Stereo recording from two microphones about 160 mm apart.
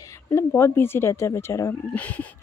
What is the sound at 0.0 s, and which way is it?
Speech, 20° left (ahead or behind).